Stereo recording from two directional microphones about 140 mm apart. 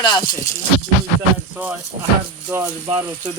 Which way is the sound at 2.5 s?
15° right (ahead or behind).